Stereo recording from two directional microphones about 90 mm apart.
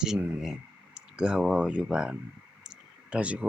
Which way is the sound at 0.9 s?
10° right (ahead or behind).